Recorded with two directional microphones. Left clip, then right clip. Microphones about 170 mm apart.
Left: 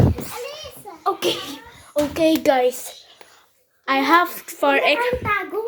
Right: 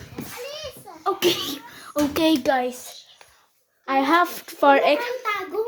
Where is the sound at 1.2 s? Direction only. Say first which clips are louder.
Right 1 dB; 15° right (ahead or behind).